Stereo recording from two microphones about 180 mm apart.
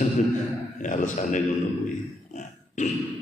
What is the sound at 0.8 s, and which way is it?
Speech, 45° left (ahead or behind).